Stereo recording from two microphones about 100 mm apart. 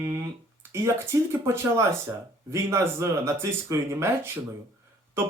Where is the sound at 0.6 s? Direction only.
25° right (ahead or behind).